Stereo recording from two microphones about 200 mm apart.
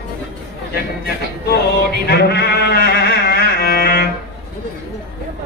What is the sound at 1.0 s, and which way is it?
Speech, 50° left (ahead or behind).